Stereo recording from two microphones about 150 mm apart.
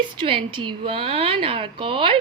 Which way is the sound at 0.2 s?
35° right (ahead or behind).